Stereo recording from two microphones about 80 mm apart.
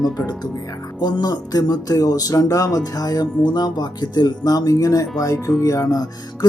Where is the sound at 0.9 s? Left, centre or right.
Left.